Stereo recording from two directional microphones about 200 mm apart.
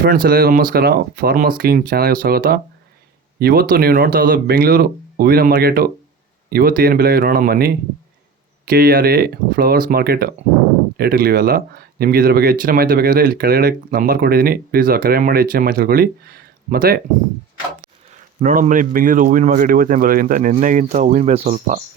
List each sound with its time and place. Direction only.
0.0 s speech: 45° right (ahead or behind)
18.1 s a man's voice: 35° right (ahead or behind)